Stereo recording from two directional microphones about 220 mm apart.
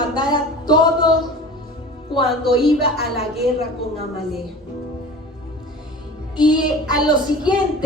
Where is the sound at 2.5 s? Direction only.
25° left (ahead or behind).